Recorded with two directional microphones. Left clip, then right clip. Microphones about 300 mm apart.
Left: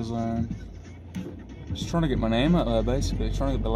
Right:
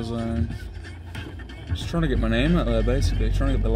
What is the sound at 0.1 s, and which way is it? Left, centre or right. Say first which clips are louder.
Speech: left 1 dB; left.